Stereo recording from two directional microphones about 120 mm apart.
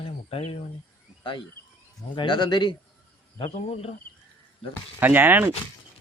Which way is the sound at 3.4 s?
55° left (ahead or behind).